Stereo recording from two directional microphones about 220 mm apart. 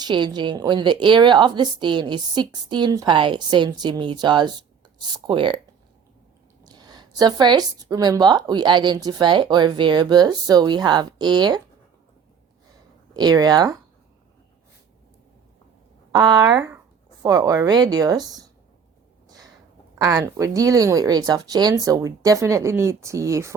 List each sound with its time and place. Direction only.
0.0 s a woman's voice: 20° right (ahead or behind)
6.7 s a woman's voice: 20° right (ahead or behind)
13.1 s speech: 20° right (ahead or behind)
16.1 s speech: 20° right (ahead or behind)
20.0 s speech: 15° right (ahead or behind)